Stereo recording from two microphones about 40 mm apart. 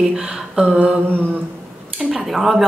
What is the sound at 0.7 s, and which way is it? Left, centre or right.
Speech, right.